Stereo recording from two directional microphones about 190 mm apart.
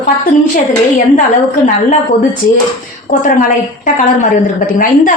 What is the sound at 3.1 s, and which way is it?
A woman's voice, 40° left (ahead or behind).